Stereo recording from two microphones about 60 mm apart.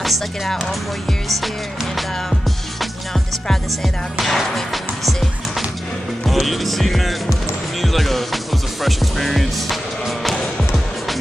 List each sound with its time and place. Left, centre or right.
0.0 s music: centre
4.2 s music: centre
6.2 s music: centre
8.8 s speech: centre